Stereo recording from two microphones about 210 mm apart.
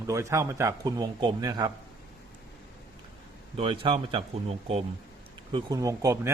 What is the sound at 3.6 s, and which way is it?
Speech, 25° right (ahead or behind).